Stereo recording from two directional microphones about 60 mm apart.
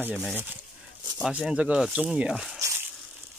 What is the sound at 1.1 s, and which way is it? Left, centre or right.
Speech, centre.